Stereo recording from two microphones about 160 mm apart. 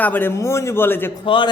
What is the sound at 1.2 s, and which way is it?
Speech, 30° left (ahead or behind).